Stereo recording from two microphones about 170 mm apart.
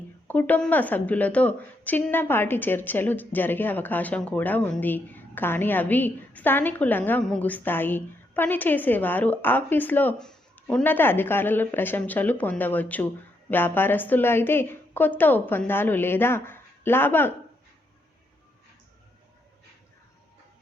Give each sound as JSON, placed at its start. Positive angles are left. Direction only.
{"t": 0.3, "sound": "a woman's voice", "side_deg": 10}